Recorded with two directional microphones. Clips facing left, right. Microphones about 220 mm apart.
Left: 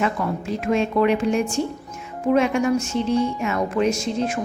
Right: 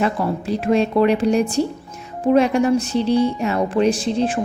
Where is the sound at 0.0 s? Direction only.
35° right (ahead or behind).